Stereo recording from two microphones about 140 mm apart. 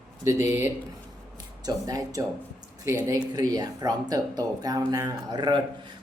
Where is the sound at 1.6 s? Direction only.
25° right (ahead or behind).